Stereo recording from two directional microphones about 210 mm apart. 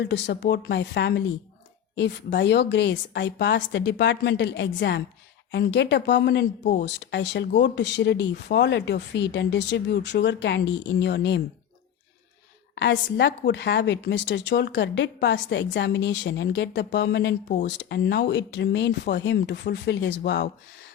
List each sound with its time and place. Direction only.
0.0 s a woman's voice: 55° left (ahead or behind)
6.6 s speech: 40° left (ahead or behind)
6.8 s a woman's voice: 55° left (ahead or behind)
12.7 s a woman's voice: 55° left (ahead or behind)